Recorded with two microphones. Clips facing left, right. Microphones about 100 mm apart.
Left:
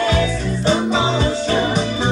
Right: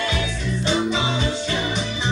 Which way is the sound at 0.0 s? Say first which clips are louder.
Left 7 dB; 35° left (ahead or behind).